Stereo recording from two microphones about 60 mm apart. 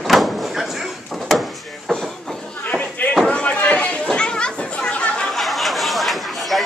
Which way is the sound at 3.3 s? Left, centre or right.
Left.